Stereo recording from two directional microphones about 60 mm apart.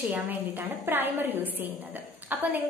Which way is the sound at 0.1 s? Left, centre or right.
Right.